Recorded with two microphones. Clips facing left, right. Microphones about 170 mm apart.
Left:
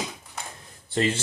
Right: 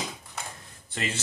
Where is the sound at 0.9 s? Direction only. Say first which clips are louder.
Left 9 dB; 30° left (ahead or behind).